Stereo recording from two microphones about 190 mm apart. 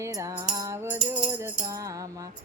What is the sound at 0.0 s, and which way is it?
Music, 15° right (ahead or behind).